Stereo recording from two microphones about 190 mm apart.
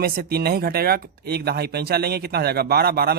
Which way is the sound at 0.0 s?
50° right (ahead or behind).